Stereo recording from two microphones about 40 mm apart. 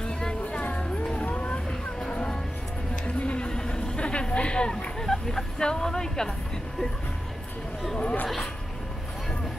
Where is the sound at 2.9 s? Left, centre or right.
Left.